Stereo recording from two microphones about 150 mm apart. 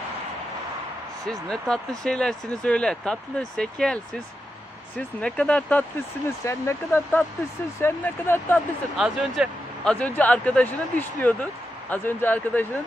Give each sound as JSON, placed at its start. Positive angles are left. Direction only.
{"t": 1.5, "sound": "speech", "side_deg": 5}
{"t": 8.9, "sound": "speech", "side_deg": -5}